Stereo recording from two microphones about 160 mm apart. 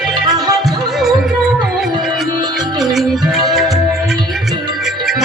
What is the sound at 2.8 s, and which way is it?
Music, centre (ahead or behind).